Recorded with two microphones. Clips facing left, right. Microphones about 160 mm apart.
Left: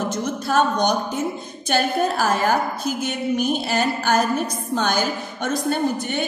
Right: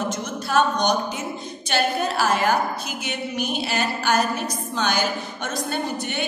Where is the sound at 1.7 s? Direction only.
50° left (ahead or behind).